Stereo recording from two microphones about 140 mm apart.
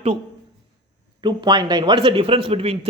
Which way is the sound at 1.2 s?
35° right (ahead or behind).